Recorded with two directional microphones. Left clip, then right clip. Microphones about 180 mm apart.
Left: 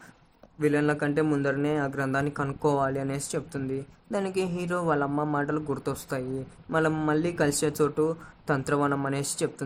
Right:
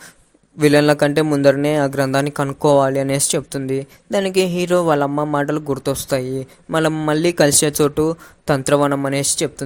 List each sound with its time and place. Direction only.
0.6 s a man's voice: 55° right (ahead or behind); by 9.6 s 35° right (ahead or behind)